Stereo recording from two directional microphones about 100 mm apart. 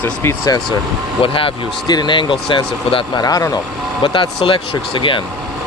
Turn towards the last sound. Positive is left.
turn(degrees=55)  # may be behind; listen again after turning